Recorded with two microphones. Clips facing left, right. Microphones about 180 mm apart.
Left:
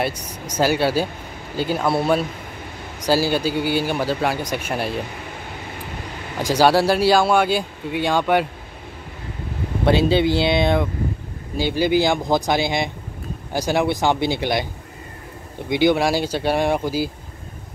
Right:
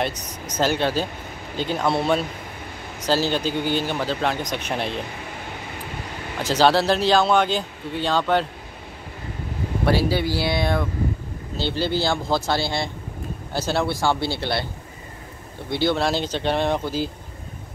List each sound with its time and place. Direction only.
0.0 s speech: 10° left (ahead or behind)
6.4 s speech: 10° left (ahead or behind)
9.8 s speech: 20° left (ahead or behind)
15.7 s speech: 15° left (ahead or behind)